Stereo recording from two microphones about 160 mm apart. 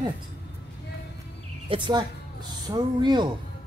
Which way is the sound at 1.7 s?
35° right (ahead or behind).